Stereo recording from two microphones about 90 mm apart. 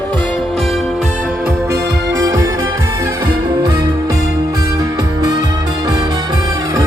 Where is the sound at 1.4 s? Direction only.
35° right (ahead or behind).